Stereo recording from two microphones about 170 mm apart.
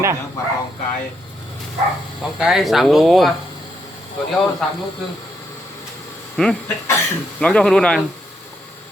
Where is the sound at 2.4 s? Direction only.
Centre (ahead or behind).